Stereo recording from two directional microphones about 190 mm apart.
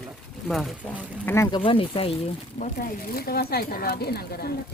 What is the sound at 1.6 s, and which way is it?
Speech, 30° left (ahead or behind).